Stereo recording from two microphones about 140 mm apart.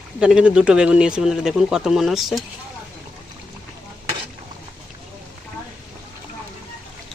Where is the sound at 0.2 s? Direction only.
5° right (ahead or behind).